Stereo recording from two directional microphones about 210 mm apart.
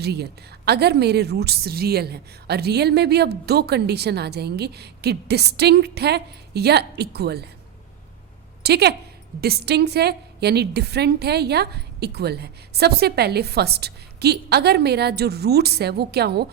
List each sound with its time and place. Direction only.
0.0 s a woman's voice: 50° right (ahead or behind)
8.6 s a woman's voice: 50° right (ahead or behind)